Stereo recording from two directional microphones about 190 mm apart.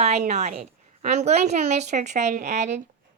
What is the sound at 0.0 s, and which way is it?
A woman's voice, 35° right (ahead or behind).